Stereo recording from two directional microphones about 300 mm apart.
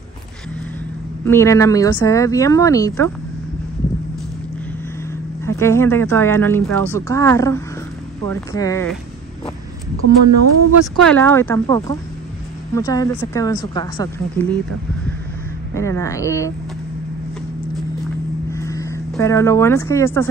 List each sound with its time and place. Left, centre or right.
1.2 s speech: centre
5.4 s speech: centre
10.0 s a woman's voice: right
11.1 s speech: centre
15.7 s speech: centre
18.5 s speech: centre